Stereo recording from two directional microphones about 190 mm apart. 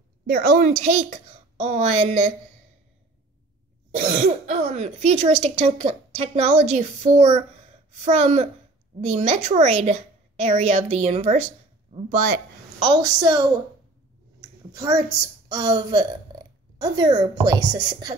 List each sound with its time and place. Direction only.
0.3 s speech: 40° right (ahead or behind)
3.9 s speech: 40° right (ahead or behind)
12.8 s a woman's voice: 25° right (ahead or behind)